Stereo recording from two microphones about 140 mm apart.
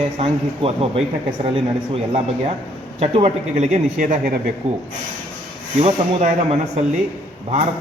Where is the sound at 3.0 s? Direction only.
45° right (ahead or behind); by 4.3 s 70° right (ahead or behind).